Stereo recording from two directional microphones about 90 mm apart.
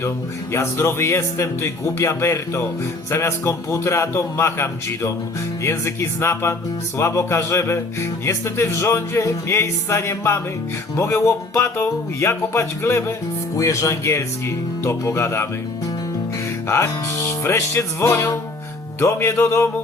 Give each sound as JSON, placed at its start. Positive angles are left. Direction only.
{"t": 0.5, "sound": "speech", "side_deg": 30}
{"t": 16.6, "sound": "speech", "side_deg": 30}